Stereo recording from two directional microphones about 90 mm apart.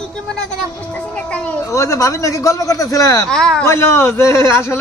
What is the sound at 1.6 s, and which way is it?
A man's voice, 35° left (ahead or behind).